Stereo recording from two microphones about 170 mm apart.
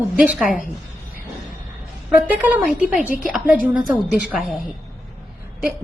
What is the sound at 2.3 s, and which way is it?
A woman's voice, 10° right (ahead or behind).